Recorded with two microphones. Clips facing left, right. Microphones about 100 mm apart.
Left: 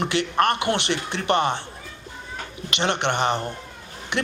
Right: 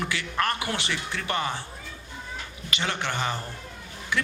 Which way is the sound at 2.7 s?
65° left (ahead or behind).